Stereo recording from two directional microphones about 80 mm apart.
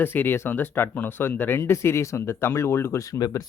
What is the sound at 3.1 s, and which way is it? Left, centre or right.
Speech, left.